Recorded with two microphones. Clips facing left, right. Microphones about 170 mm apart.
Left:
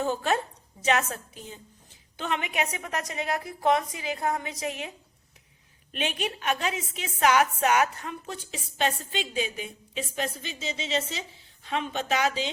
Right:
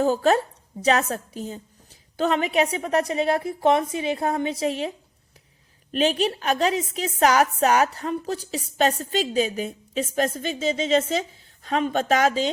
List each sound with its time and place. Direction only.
0.0 s a woman's voice: 40° right (ahead or behind)
5.9 s a woman's voice: 35° right (ahead or behind)